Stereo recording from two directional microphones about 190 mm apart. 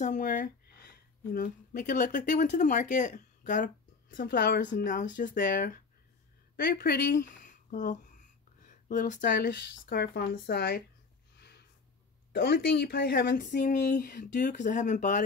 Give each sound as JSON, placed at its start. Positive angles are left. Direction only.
{"t": 0.0, "sound": "speech", "side_deg": 40}
{"t": 6.5, "sound": "a sound", "side_deg": 50}
{"t": 9.2, "sound": "speech", "side_deg": 65}
{"t": 12.3, "sound": "speech", "side_deg": 55}
{"t": 13.4, "sound": "speech", "side_deg": 45}